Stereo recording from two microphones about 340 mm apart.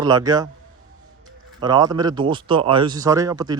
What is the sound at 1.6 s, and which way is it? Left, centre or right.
Speech, centre.